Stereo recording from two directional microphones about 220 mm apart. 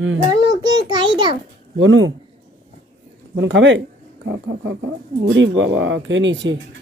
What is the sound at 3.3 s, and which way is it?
Speech, 55° right (ahead or behind).